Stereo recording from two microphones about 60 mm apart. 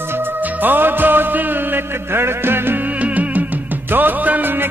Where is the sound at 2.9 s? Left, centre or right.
Right.